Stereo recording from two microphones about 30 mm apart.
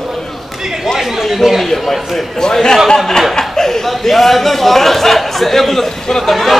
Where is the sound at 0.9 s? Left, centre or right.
Centre.